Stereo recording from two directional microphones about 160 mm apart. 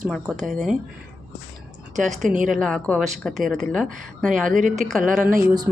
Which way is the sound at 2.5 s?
Centre (ahead or behind).